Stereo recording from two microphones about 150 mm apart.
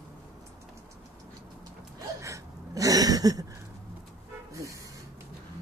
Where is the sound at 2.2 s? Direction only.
20° right (ahead or behind).